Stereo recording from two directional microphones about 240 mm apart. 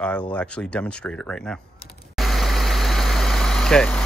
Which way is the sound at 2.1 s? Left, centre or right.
Centre.